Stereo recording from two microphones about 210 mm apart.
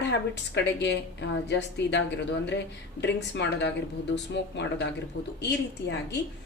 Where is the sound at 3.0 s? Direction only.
55° left (ahead or behind).